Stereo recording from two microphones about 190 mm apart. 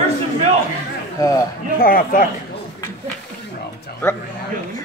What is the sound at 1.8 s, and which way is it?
Speech, 50° left (ahead or behind).